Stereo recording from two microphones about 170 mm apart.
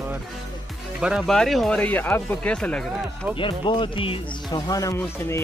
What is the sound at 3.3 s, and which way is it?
Speech, 30° left (ahead or behind).